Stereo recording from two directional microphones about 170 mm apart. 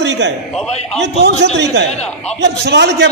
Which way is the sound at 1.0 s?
80° right.